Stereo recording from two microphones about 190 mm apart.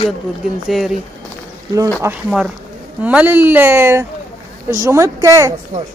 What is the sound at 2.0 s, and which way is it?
Speech, 15° right (ahead or behind).